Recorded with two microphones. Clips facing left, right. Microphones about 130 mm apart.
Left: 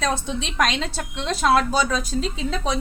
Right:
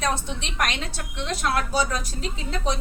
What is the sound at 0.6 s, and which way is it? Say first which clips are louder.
A woman's voice: left 4 dB; 90° left.